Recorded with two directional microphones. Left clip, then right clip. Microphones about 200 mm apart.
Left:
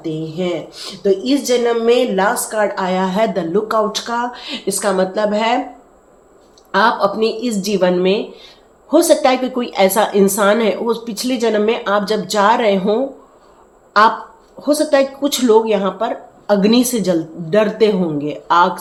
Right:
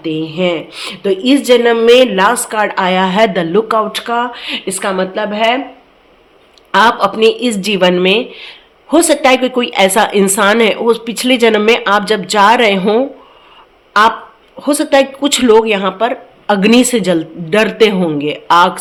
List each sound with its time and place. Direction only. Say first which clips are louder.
0.0 s speech: right 6 dB; 40° right (ahead or behind); by 5.5 s 5° right (ahead or behind)
6.7 s a woman's voice: right 4 dB; 25° right (ahead or behind)
14.6 s a woman's voice: right 3 dB; 25° right (ahead or behind)